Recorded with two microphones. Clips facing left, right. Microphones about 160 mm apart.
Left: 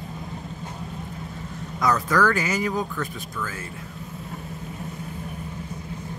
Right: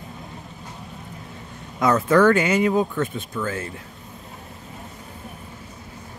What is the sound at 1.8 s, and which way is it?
Speech, 25° right (ahead or behind).